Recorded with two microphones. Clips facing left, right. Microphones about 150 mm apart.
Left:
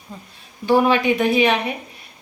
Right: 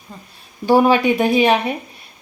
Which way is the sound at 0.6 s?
35° right (ahead or behind).